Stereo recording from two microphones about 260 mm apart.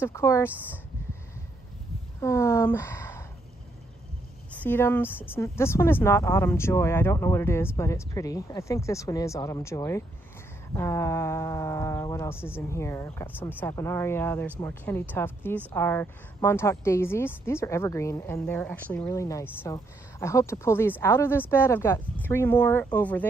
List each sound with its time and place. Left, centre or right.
0.0 s a woman's voice: centre
2.2 s speech: centre
4.5 s a woman's voice: centre